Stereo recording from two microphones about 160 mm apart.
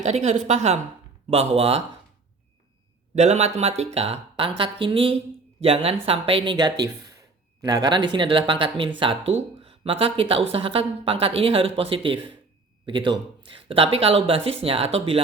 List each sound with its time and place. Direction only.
0.0 s a woman's voice: 45° right (ahead or behind)
3.2 s speech: 45° right (ahead or behind)